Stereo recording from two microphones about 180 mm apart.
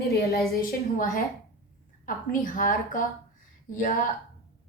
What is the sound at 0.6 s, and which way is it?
A woman's voice, 50° left (ahead or behind).